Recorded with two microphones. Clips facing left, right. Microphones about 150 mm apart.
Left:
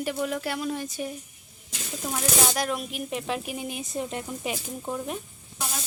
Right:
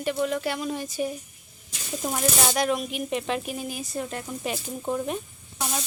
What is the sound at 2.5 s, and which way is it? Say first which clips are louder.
A woman's voice: right 4 dB; centre (ahead or behind).